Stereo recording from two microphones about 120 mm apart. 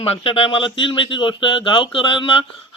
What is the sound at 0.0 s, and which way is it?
Speech, 55° left (ahead or behind).